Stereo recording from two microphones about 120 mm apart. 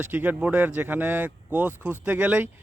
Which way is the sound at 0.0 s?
15° right (ahead or behind).